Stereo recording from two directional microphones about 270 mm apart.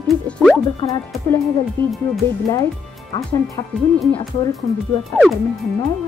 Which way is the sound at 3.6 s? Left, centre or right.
Centre.